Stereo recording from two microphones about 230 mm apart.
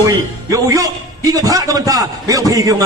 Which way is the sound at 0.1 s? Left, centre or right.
Centre.